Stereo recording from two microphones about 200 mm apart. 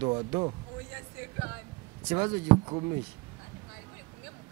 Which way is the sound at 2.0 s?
20° right (ahead or behind).